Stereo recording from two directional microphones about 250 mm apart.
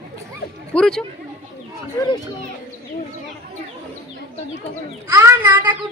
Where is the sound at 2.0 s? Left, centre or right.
Centre.